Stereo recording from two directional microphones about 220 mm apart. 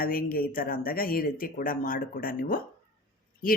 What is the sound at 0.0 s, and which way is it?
Speech, 40° left (ahead or behind).